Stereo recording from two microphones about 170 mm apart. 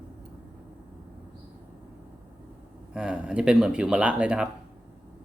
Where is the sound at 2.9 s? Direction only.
5° right (ahead or behind).